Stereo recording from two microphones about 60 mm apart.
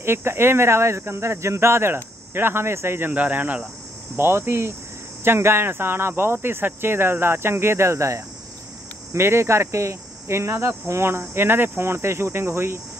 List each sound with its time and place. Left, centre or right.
0.0 s speech: right
3.1 s speech: right
4.2 s speech: right